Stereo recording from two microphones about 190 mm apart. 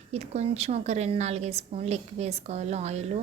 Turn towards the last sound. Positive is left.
turn(degrees=-35)  # may be behind; listen again after turning